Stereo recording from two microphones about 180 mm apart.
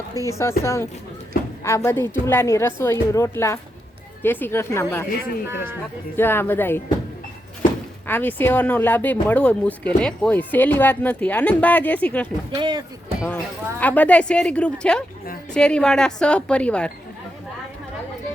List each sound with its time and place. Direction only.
0.3 s speech: 15° left (ahead or behind)
5.5 s speech: 15° right (ahead or behind)
6.1 s speech: 10° left (ahead or behind)
8.0 s speech: 10° left (ahead or behind)
12.5 s speech: 20° right (ahead or behind)
13.2 s a woman's voice: 10° left (ahead or behind)